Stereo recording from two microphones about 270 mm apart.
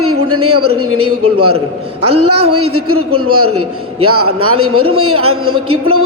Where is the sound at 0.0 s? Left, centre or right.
Right.